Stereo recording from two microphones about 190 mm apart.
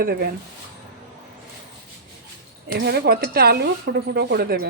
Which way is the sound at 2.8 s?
55° right (ahead or behind).